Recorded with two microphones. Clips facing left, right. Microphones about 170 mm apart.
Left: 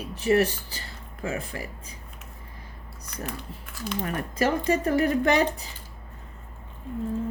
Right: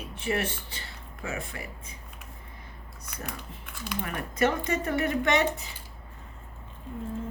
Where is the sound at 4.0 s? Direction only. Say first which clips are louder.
Left 1 dB; 35° left (ahead or behind).